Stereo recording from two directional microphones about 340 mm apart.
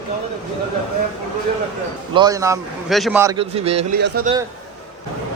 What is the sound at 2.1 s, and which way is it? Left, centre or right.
A man's voice, centre.